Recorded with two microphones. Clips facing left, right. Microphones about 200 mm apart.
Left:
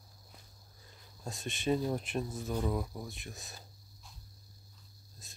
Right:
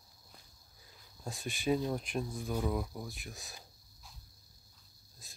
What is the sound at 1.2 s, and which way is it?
Speech, centre (ahead or behind).